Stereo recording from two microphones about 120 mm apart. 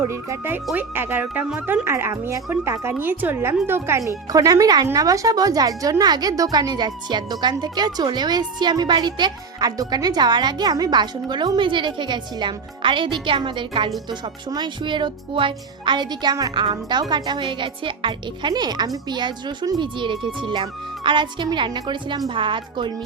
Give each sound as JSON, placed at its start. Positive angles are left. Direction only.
{"t": 0.0, "sound": "a woman's voice", "side_deg": -25}